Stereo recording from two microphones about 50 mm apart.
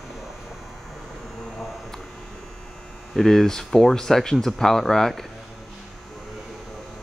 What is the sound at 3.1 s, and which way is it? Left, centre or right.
Speech, centre.